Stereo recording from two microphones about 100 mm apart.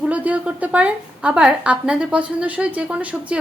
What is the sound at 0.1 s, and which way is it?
A woman's voice, 15° right (ahead or behind).